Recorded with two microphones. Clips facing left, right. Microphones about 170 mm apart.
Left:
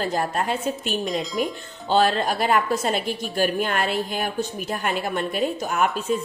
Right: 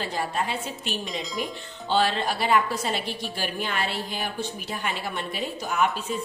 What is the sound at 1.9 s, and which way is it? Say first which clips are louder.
A woman's voice: left 4 dB; 45° left (ahead or behind).